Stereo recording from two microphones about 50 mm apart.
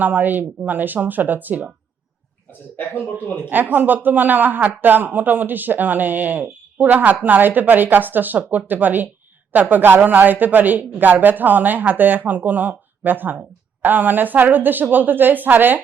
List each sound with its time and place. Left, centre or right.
0.0 s speech: right
2.5 s speech: left
3.5 s speech: right